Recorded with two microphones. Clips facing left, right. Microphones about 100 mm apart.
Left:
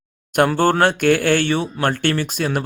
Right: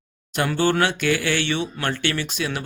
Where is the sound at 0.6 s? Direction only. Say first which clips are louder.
Left 4 dB; 50° left (ahead or behind).